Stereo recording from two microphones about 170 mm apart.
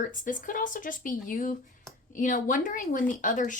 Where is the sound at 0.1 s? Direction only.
50° left (ahead or behind).